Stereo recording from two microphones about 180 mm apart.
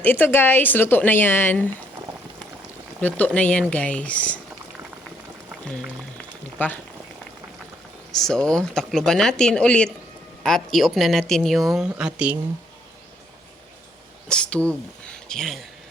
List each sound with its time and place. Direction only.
0.0 s a woman's voice: 10° left (ahead or behind)
3.0 s a woman's voice: 10° left (ahead or behind)
5.5 s boiling: centre (ahead or behind)
6.6 s a woman's voice: 10° left (ahead or behind)
8.1 s speech: 5° left (ahead or behind)
14.3 s speech: 5° left (ahead or behind)